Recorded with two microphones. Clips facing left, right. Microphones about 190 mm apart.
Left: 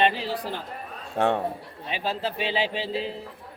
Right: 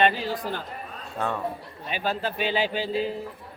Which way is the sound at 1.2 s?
70° left (ahead or behind).